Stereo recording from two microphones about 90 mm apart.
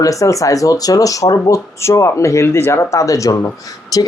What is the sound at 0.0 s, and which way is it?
Speech, 40° left (ahead or behind).